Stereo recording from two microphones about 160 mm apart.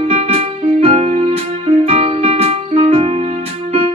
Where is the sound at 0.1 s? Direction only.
40° right (ahead or behind).